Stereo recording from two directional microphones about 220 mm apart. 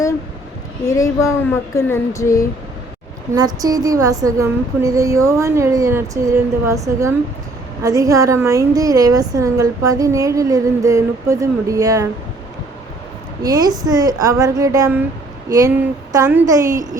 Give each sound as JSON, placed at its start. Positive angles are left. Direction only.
{"t": 0.9, "sound": "speech", "side_deg": 15}
{"t": 3.3, "sound": "a woman's voice", "side_deg": -15}
{"t": 13.4, "sound": "a woman's voice", "side_deg": -15}